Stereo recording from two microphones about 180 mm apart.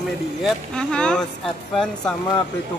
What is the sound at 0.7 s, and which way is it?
Speech, 5° left (ahead or behind).